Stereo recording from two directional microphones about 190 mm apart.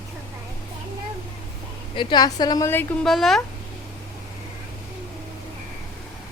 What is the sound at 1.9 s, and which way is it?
A woman's voice, 25° left (ahead or behind).